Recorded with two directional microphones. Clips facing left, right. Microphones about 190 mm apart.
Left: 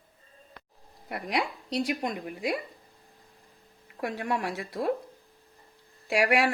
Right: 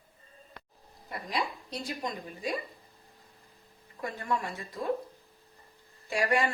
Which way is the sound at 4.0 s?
70° left (ahead or behind).